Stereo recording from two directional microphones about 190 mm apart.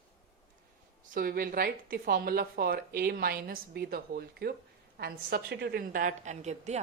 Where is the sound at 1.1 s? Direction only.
50° right (ahead or behind).